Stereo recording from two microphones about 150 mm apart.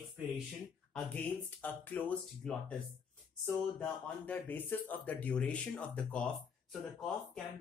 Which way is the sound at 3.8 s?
10° left (ahead or behind).